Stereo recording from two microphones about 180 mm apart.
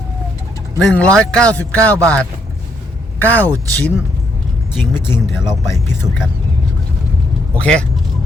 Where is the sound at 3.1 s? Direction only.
10° left (ahead or behind).